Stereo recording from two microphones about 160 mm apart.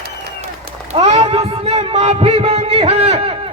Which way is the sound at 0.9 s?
40° right (ahead or behind).